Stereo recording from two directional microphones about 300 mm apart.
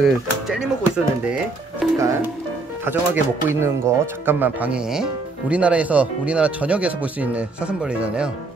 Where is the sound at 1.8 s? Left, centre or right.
Centre.